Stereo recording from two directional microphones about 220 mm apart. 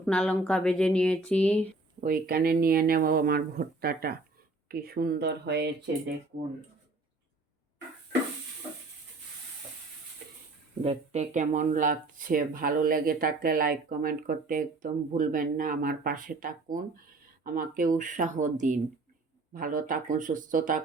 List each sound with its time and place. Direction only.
0.0 s speech: 5° left (ahead or behind)
2.0 s speech: 40° right (ahead or behind)
10.8 s speech: 30° right (ahead or behind)